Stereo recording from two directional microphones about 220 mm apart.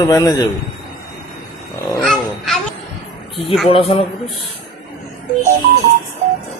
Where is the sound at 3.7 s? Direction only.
25° left (ahead or behind).